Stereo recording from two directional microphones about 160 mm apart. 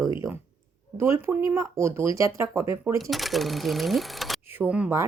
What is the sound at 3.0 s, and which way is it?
Speech, centre (ahead or behind).